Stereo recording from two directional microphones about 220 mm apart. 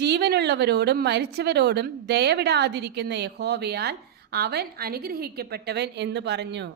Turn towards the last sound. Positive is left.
turn(degrees=-50)  # may be behind; listen again after turning